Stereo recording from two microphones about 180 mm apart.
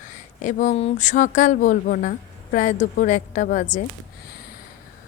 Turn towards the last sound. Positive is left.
turn(degrees=45)  # may be behind; listen again after turning